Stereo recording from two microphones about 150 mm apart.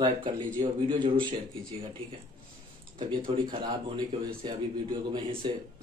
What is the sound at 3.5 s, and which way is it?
Speech, 30° right (ahead or behind).